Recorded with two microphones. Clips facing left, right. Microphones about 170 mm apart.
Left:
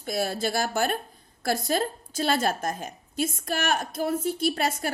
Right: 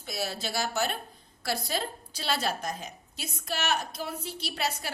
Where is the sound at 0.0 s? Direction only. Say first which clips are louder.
Left 7 dB; 50° left (ahead or behind).